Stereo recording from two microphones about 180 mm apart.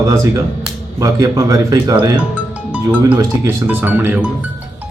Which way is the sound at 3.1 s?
10° right (ahead or behind).